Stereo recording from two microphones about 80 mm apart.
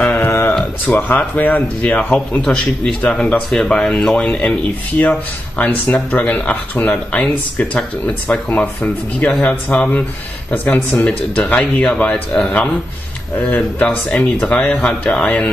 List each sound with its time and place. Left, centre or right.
0.0 s a sound: left
0.8 s speech: centre
6.1 s speech: left